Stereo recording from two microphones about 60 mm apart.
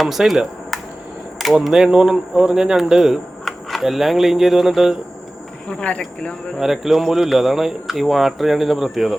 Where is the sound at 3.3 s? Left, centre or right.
Centre.